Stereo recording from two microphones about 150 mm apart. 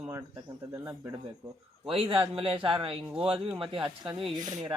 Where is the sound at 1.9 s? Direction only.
40° right (ahead or behind).